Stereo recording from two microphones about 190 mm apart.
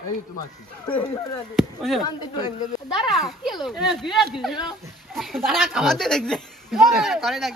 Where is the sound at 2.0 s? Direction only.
20° left (ahead or behind).